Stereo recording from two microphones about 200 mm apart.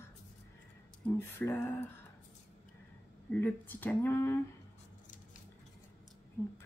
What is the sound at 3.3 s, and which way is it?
Speech, 10° left (ahead or behind).